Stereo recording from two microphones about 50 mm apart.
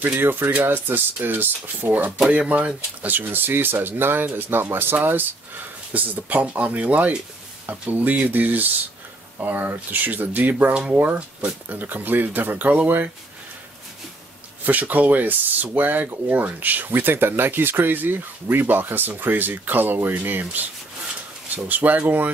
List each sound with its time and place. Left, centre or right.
0.2 s speech: right
11.7 s speech: right
14.6 s speech: right
21.6 s speech: right